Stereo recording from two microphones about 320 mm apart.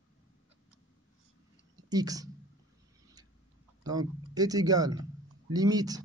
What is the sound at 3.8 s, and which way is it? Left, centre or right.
Speech, centre.